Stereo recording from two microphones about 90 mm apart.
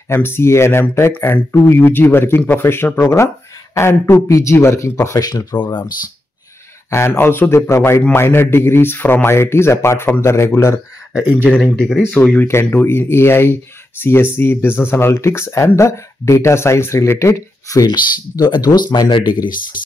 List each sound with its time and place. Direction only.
0.1 s speech: 25° left (ahead or behind); by 5.5 s 40° left (ahead or behind)
5.6 s speech: 65° left (ahead or behind)
6.9 s speech: 30° left (ahead or behind)
11.7 s speech: 10° left (ahead or behind); by 17.9 s 40° left (ahead or behind)
18.6 s speech: 50° left (ahead or behind)